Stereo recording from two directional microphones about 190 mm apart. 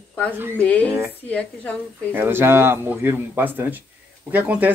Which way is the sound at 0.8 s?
15° right (ahead or behind).